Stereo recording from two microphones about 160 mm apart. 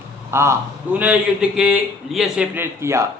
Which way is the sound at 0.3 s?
15° right (ahead or behind).